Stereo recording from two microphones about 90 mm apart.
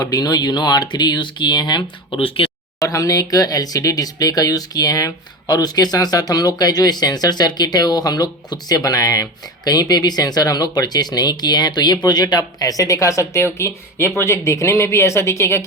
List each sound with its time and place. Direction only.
0.0 s speech: 45° left (ahead or behind)
2.1 s speech: 85° left
2.7 s speech: 35° left (ahead or behind)